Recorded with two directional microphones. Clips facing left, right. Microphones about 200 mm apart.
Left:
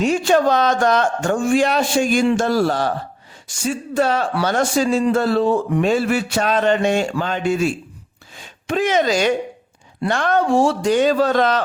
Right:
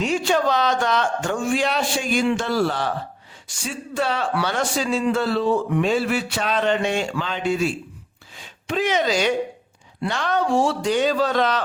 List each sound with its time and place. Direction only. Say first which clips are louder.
0.0 s speech: left 5 dB; 45° left (ahead or behind)